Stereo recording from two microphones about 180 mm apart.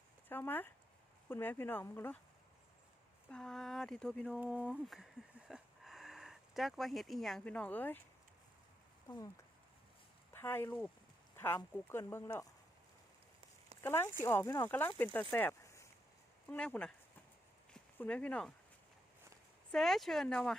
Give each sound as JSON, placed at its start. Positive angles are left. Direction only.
{"t": 0.3, "sound": "speech", "side_deg": 10}
{"t": 3.2, "sound": "speech", "side_deg": 5}
{"t": 4.4, "sound": "speech", "side_deg": -5}
{"t": 9.0, "sound": "speech", "side_deg": 25}
{"t": 10.3, "sound": "speech", "side_deg": 10}
{"t": 13.8, "sound": "speech", "side_deg": 15}
{"t": 17.9, "sound": "speech", "side_deg": 10}
{"t": 19.7, "sound": "speech", "side_deg": 0}